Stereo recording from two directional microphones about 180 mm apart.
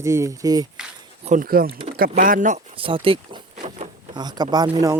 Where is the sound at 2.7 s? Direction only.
30° right (ahead or behind).